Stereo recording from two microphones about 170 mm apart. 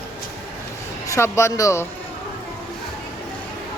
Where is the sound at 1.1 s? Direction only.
15° left (ahead or behind).